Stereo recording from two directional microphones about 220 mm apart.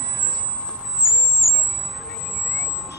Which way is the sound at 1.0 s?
Centre (ahead or behind).